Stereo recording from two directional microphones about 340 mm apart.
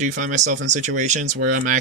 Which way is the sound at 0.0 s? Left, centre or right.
Right.